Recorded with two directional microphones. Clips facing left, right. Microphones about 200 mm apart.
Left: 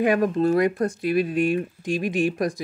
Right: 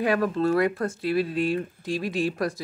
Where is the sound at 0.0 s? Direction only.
15° left (ahead or behind).